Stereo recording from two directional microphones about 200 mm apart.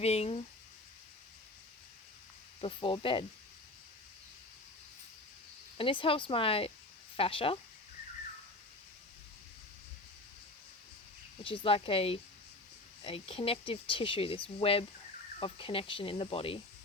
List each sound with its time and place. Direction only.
0.0 s speech: 30° left (ahead or behind)
2.6 s speech: 25° left (ahead or behind)
5.7 s speech: 25° left (ahead or behind)
11.4 s speech: 25° left (ahead or behind)